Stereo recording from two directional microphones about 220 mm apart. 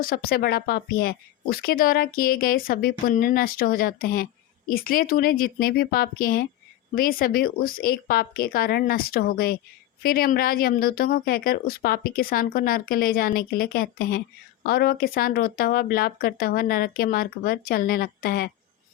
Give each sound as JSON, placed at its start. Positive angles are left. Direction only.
{"t": 0.0, "sound": "speech", "side_deg": 40}